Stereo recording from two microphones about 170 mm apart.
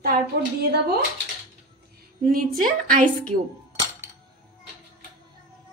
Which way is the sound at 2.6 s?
50° right (ahead or behind).